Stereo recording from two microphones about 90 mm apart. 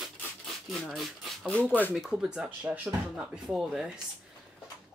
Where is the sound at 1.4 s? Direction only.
15° left (ahead or behind).